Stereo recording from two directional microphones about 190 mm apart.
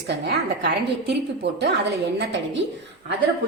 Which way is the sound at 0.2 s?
60° right (ahead or behind).